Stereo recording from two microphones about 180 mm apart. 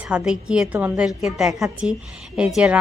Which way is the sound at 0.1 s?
5° right (ahead or behind).